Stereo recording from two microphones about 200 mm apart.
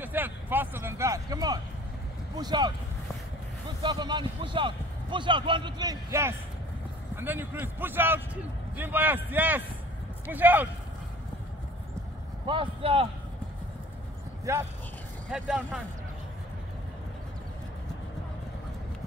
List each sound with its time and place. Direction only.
0.0 s a sound: 10° right (ahead or behind)
2.3 s speech: 20° right (ahead or behind)
3.8 s a man's voice: 20° right (ahead or behind)
12.4 s a man's voice: 25° right (ahead or behind)
14.5 s a man's voice: 15° right (ahead or behind)
15.3 s speech: 5° right (ahead or behind)